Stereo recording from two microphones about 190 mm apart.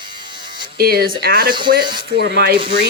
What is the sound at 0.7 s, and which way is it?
Speech, 55° right (ahead or behind).